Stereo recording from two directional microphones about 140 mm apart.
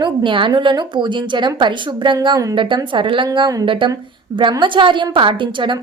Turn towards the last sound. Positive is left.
turn(degrees=-35)  # may be behind; listen again after turning